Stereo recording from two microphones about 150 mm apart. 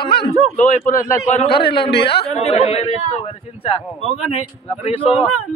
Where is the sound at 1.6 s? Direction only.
90° left.